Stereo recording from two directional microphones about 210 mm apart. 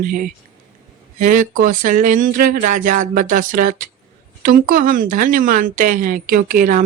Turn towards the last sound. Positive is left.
turn(degrees=-40)  # may be behind; listen again after turning